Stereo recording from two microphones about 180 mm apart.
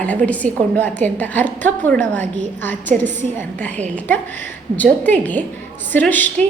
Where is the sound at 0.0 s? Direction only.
10° left (ahead or behind).